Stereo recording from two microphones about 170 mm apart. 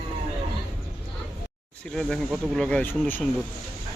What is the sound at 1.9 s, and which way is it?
Speech, centre (ahead or behind).